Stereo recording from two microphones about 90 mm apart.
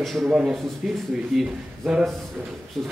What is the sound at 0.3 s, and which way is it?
A man's voice, 10° right (ahead or behind).